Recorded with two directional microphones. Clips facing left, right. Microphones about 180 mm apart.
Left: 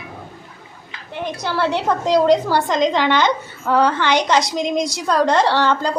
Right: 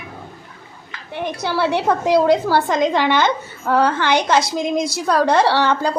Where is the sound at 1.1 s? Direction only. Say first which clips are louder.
Right 1 dB; 15° right (ahead or behind).